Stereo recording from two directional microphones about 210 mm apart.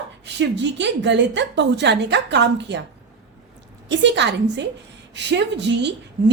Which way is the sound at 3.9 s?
55° right (ahead or behind).